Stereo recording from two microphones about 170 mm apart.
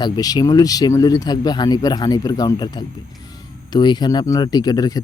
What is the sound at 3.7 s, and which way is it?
Speech, 25° left (ahead or behind).